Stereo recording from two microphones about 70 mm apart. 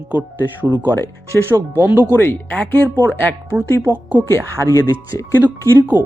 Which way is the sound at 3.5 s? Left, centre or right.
Right.